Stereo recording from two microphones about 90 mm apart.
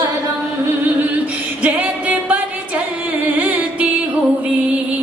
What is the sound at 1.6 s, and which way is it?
Music, 15° right (ahead or behind).